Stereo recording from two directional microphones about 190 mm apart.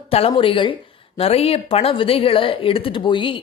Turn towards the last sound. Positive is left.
turn(degrees=25)  # may be behind; listen again after turning